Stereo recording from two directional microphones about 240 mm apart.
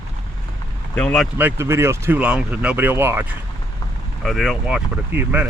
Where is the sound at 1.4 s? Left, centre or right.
Centre.